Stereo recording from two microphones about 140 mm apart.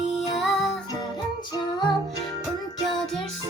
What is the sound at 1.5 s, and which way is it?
Music, 30° left (ahead or behind).